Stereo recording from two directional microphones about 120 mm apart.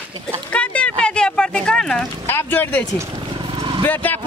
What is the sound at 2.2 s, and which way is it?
Speech, 20° left (ahead or behind).